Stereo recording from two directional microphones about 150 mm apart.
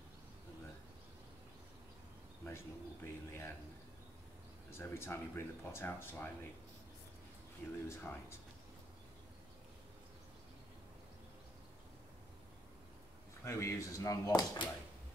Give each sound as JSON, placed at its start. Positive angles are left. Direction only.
{"t": 2.4, "sound": "speech", "side_deg": 15}
{"t": 4.6, "sound": "speech", "side_deg": 15}
{"t": 7.9, "sound": "speech", "side_deg": 15}
{"t": 13.4, "sound": "speech", "side_deg": 20}